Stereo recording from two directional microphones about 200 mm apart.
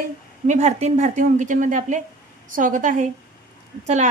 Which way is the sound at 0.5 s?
35° right (ahead or behind).